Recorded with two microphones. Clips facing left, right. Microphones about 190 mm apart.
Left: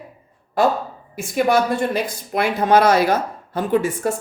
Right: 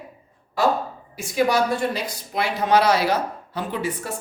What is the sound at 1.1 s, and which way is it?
Speech, 55° left (ahead or behind).